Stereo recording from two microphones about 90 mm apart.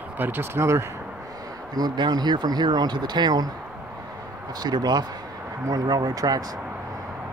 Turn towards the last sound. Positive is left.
turn(degrees=-45)  # may be behind; listen again after turning